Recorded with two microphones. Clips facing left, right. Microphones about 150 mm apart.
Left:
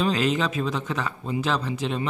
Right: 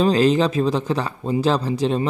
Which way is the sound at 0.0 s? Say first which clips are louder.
Right 7 dB; 35° right (ahead or behind).